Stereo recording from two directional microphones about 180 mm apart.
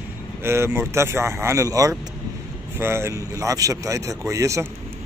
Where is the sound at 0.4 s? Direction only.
15° right (ahead or behind).